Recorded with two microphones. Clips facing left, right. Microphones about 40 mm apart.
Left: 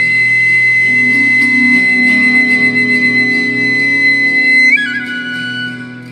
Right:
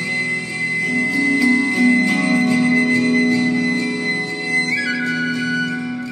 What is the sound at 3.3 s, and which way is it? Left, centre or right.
Music, left.